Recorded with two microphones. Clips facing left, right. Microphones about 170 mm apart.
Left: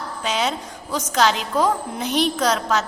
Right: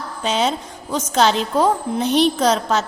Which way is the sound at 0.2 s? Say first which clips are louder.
Right 4 dB; 30° right (ahead or behind).